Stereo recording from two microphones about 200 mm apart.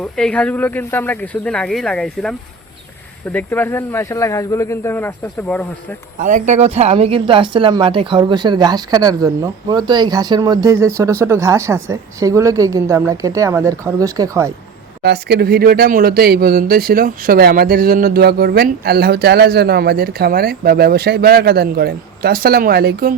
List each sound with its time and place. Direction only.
0.0 s speech: 5° left (ahead or behind)
3.3 s speech: 10° left (ahead or behind)
6.1 s speech: 40° right (ahead or behind); by 14.5 s 15° right (ahead or behind)
15.0 s speech: 50° right (ahead or behind)